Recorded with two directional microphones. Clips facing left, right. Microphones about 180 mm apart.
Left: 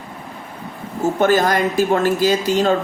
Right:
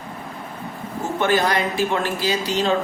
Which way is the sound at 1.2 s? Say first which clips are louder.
Left 4 dB; 45° left (ahead or behind).